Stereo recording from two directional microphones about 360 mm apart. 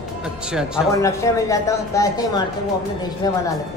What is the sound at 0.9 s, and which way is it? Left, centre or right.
Speech, centre.